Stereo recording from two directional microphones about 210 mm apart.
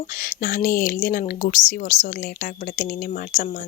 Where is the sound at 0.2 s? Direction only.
40° left (ahead or behind).